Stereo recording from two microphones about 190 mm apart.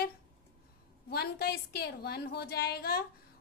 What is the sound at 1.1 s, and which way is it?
A woman's voice, 55° left (ahead or behind).